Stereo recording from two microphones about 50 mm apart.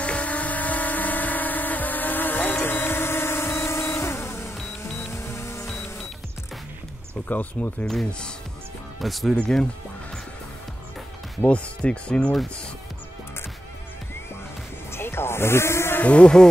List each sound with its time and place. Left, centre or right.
0.0 s vehicle: left
5.0 s music: left
7.2 s speech: left
7.8 s speech: centre
9.0 s speech: centre
11.4 s speech: left
14.9 s sheep: left
16.0 s speech: left